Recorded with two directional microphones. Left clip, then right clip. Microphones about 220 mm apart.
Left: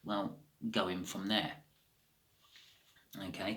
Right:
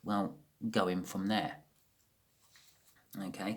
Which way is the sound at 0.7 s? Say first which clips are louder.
Right 3 dB; 50° right (ahead or behind).